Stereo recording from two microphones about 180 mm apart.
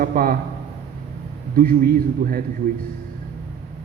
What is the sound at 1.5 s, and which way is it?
Speech, 50° right (ahead or behind).